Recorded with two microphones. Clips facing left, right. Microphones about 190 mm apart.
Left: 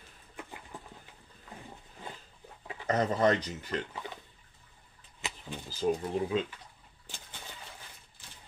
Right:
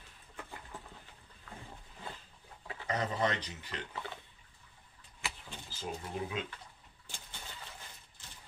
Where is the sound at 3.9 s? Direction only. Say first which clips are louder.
Left 1 dB; 15° left (ahead or behind).